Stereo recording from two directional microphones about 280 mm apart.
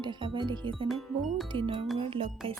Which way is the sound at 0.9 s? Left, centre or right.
Centre.